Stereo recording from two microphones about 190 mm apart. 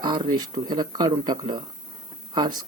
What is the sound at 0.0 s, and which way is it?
Speech, 25° right (ahead or behind).